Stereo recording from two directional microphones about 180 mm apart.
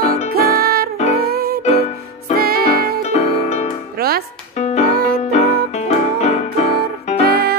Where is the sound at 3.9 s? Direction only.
55° right (ahead or behind).